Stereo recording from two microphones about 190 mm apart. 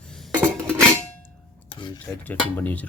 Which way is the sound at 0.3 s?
5° left (ahead or behind).